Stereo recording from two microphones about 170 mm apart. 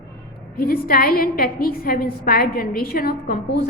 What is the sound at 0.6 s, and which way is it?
A woman's voice, 60° left (ahead or behind).